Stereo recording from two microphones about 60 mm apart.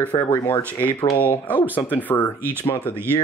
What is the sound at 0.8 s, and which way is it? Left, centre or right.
Speech, left.